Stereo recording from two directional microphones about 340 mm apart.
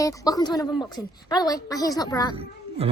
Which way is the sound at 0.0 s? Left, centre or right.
Centre.